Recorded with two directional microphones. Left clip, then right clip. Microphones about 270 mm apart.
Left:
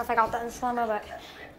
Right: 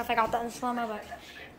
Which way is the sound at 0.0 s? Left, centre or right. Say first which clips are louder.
Left 2 dB; centre.